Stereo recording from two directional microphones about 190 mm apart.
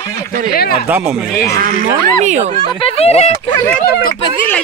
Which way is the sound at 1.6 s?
45° right (ahead or behind).